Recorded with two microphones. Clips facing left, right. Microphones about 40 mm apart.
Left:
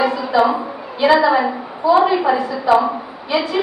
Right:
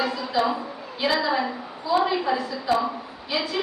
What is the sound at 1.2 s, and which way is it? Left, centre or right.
A woman's voice, centre.